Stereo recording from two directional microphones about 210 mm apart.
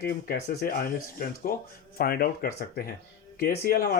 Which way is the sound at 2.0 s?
45° left (ahead or behind).